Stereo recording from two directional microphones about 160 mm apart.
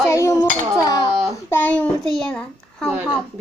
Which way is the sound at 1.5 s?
10° left (ahead or behind).